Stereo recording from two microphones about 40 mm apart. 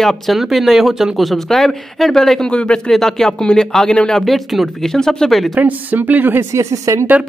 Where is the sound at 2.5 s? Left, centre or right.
Left.